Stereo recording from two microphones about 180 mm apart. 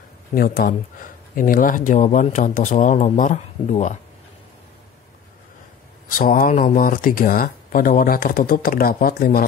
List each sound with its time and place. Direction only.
0.3 s speech: 55° left (ahead or behind)
6.1 s speech: 50° left (ahead or behind)